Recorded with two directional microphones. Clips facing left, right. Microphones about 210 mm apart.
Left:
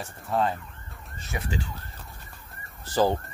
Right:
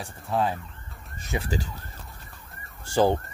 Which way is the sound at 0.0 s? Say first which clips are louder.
Even; centre (ahead or behind).